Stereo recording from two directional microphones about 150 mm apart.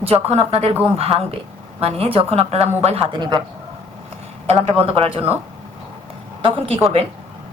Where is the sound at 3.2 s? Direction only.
30° right (ahead or behind).